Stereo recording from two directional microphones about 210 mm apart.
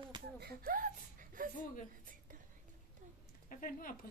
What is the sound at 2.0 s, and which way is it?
Whispering, 40° right (ahead or behind).